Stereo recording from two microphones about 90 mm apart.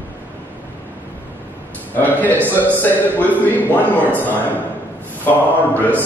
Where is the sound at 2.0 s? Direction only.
20° left (ahead or behind).